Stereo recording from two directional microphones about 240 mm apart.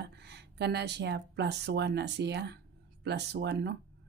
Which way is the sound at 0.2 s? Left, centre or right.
Right.